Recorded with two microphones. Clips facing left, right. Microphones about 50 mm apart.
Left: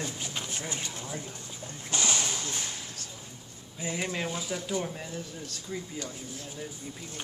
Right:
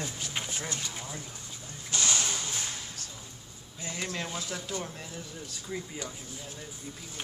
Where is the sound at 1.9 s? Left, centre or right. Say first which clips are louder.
Left 1 dB; centre.